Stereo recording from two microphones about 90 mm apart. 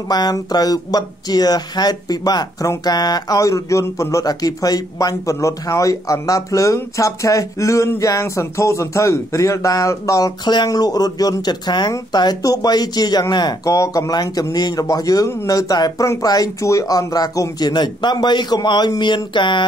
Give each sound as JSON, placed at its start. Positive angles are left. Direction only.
{"t": 0.1, "sound": "speech", "side_deg": 50}